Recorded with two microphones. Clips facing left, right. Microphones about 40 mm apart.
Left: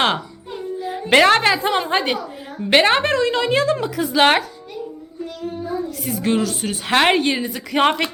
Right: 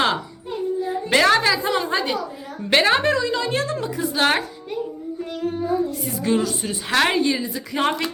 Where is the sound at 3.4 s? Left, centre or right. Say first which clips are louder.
Left 5 dB; left.